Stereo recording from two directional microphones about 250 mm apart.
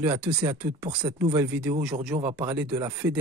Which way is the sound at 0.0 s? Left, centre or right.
Centre.